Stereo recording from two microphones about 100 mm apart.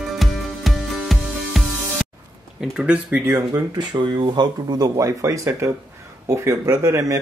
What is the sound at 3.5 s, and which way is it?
Speech, 45° right (ahead or behind).